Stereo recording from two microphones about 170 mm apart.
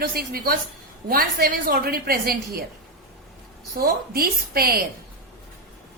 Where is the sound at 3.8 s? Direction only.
65° right (ahead or behind).